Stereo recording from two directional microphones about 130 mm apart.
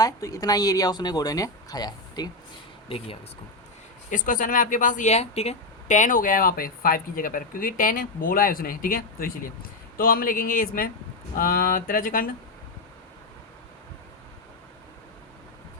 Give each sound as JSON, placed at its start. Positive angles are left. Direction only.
{"t": 0.0, "sound": "speech", "side_deg": 25}
{"t": 4.1, "sound": "a woman's voice", "side_deg": 90}